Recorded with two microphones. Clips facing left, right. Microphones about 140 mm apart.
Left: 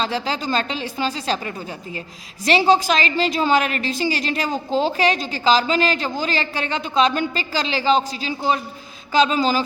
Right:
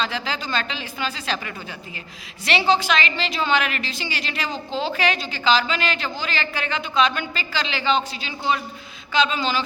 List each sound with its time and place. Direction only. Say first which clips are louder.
0.0 s a woman's voice: left 4 dB; 35° left (ahead or behind)